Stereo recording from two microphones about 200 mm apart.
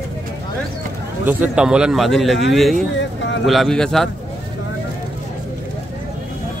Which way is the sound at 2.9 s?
65° left (ahead or behind).